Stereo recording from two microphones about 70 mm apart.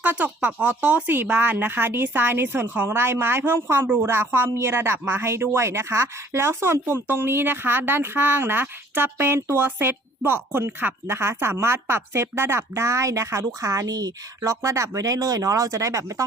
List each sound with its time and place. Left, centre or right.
0.0 s speech: right